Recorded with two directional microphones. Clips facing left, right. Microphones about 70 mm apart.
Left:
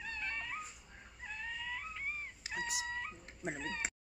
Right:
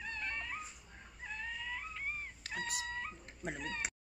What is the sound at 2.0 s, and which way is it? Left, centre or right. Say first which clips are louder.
Cat: even; centre.